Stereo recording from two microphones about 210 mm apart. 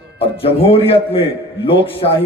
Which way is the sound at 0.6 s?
25° left (ahead or behind).